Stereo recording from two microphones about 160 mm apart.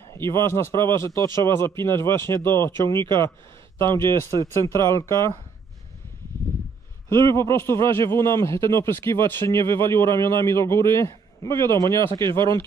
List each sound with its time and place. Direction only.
0.2 s speech: 15° left (ahead or behind)
7.1 s speech: 15° left (ahead or behind)
12.2 s speech: 30° right (ahead or behind)